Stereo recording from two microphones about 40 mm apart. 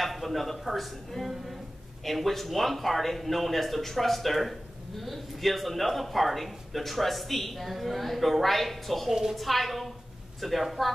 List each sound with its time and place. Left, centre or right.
0.0 s a man's voice: centre
9.1 s a woman's voice: centre
9.4 s a man's voice: centre